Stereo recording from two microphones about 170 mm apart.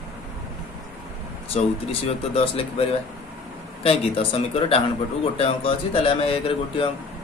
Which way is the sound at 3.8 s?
30° left (ahead or behind).